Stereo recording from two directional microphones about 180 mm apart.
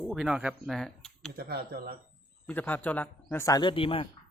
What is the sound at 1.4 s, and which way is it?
Speech, 60° right (ahead or behind).